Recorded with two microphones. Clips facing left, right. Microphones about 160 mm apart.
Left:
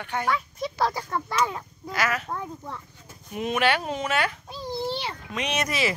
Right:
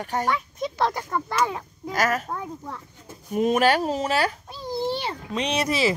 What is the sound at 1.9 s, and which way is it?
Speech, 45° right (ahead or behind).